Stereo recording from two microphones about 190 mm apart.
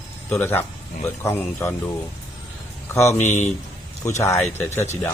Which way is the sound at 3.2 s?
40° left (ahead or behind).